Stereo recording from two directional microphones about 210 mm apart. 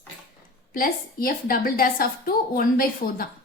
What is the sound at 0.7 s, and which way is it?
Speech, 40° left (ahead or behind).